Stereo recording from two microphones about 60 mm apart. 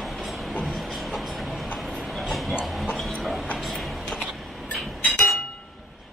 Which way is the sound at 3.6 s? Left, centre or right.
Centre.